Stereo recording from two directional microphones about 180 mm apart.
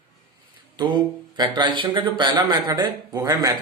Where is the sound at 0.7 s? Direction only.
25° right (ahead or behind).